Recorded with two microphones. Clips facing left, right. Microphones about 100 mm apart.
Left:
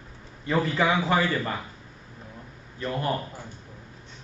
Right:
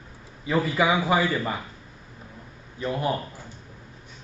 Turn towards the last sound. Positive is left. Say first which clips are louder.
# right 2 dB
turn(degrees=-15)  # may be behind; listen again after turning